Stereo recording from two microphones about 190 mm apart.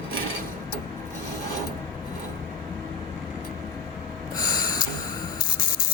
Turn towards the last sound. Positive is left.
turn(degrees=20)  # may be behind; listen again after turning